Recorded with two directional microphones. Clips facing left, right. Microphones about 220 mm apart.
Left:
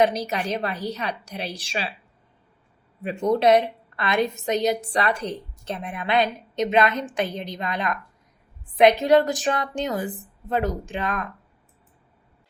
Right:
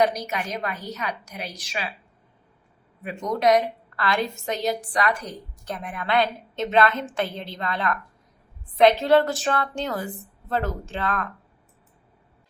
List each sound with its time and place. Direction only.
0.0 s a woman's voice: 30° left (ahead or behind)
3.0 s a woman's voice: 30° left (ahead or behind)